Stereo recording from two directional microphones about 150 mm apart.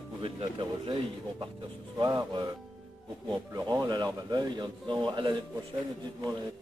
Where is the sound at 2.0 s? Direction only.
25° right (ahead or behind).